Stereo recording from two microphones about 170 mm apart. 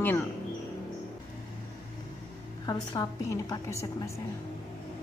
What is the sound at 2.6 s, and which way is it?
A woman's voice, 20° left (ahead or behind).